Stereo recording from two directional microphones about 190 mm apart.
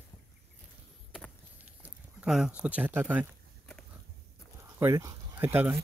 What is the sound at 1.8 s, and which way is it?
Speech, 5° right (ahead or behind).